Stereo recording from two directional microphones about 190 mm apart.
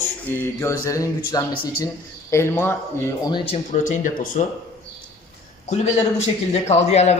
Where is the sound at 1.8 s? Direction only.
15° left (ahead or behind); by 4.4 s 45° left (ahead or behind).